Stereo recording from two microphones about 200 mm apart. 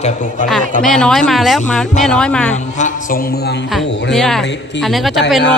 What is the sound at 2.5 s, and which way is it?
A woman's voice, 35° left (ahead or behind).